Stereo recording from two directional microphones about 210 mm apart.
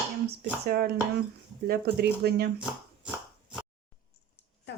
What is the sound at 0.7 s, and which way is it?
Speech, 45° right (ahead or behind).